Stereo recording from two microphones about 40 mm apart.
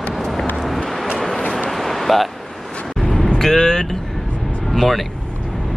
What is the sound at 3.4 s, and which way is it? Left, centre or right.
Speech, centre.